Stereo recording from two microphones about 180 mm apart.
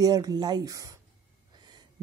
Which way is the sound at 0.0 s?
20° right (ahead or behind).